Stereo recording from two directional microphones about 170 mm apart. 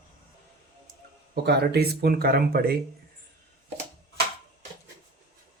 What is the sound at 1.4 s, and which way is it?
Speech, 70° right (ahead or behind).